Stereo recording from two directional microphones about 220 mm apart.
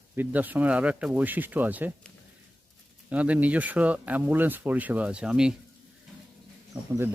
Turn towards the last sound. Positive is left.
turn(degrees=-10)  # may be behind; listen again after turning